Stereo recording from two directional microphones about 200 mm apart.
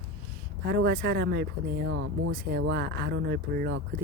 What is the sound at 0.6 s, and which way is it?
Speech, 55° right (ahead or behind).